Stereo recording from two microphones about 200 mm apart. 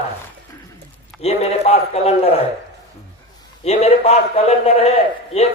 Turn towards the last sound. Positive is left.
turn(degrees=30)  # may be behind; listen again after turning